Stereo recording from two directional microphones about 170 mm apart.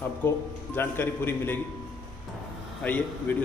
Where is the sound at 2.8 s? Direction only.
10° left (ahead or behind).